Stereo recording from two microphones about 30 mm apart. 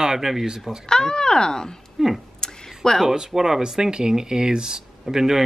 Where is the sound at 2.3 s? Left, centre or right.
Centre.